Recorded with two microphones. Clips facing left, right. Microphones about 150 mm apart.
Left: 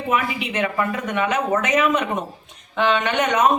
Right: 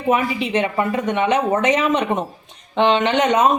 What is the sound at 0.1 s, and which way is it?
Speech, 30° right (ahead or behind).